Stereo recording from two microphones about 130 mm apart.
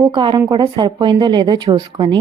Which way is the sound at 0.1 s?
40° right (ahead or behind).